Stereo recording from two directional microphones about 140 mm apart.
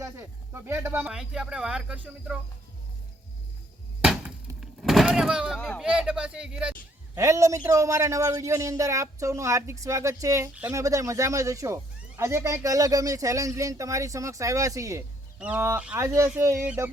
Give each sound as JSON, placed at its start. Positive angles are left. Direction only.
{"t": 0.0, "sound": "speech", "side_deg": -20}
{"t": 4.0, "sound": "a sound", "side_deg": -5}
{"t": 5.5, "sound": "speech", "side_deg": 10}
{"t": 5.8, "sound": "speech", "side_deg": -5}
{"t": 7.2, "sound": "speech", "side_deg": -20}
{"t": 15.4, "sound": "speech", "side_deg": -10}